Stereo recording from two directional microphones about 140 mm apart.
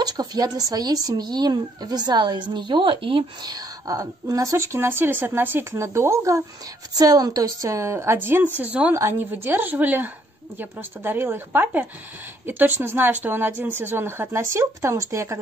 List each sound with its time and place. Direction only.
0.0 s speech: 30° right (ahead or behind)